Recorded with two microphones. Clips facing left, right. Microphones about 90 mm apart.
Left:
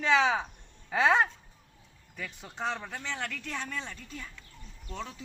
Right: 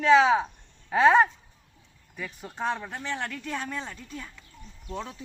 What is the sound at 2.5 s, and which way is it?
Speech, 20° right (ahead or behind).